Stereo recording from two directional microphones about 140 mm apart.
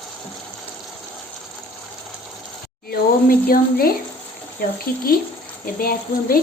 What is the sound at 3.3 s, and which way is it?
Speech, 90° left.